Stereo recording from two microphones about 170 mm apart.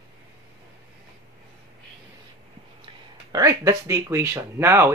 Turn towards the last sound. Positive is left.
turn(degrees=-15)  # may be behind; listen again after turning